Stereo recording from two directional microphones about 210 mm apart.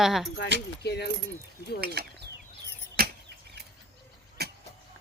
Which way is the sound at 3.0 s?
45° right (ahead or behind).